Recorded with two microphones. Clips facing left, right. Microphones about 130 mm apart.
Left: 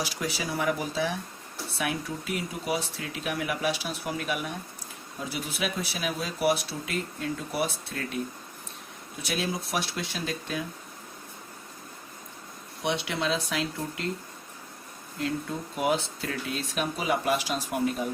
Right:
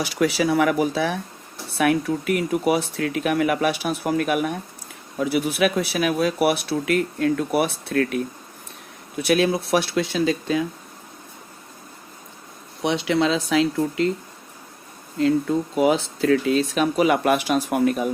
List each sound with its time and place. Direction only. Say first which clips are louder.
0.0 s speech: right 11 dB; 70° right (ahead or behind)
5.1 s speech: right 13 dB; 65° right (ahead or behind)
9.2 s speech: right 12 dB; 65° right (ahead or behind); by 10.3 s 90° right
12.8 s speech: right 9 dB; 90° right
15.4 s speech: right 9 dB; 90° right; by 18.1 s 70° right (ahead or behind)